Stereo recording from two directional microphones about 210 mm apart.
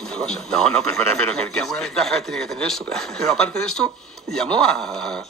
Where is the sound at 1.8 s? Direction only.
Centre (ahead or behind).